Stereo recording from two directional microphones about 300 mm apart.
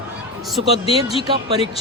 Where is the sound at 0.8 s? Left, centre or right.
Centre.